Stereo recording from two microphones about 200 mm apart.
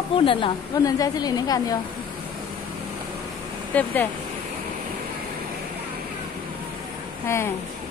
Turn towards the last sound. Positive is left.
turn(degrees=15)  # may be behind; listen again after turning